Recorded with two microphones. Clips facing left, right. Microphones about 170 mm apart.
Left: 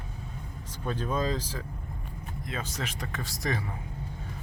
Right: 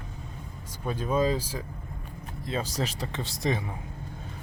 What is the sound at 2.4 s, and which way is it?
Speech, 35° right (ahead or behind).